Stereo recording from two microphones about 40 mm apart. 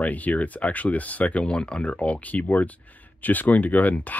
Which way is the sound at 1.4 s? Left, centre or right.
Left.